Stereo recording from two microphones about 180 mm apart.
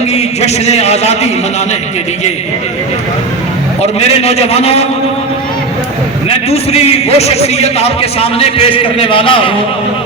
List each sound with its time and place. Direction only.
0.1 s a man's voice: 35° left (ahead or behind)
4.2 s a man's voice: 35° left (ahead or behind)
6.2 s a man's voice: 35° left (ahead or behind)